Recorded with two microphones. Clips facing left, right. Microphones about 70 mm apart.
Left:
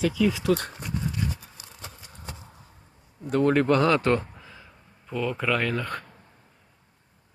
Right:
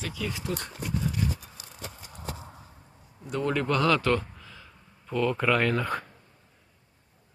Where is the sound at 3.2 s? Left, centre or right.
Left.